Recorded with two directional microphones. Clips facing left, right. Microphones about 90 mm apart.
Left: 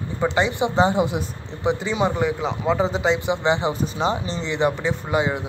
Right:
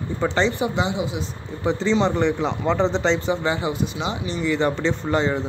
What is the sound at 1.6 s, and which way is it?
Speech, 15° left (ahead or behind).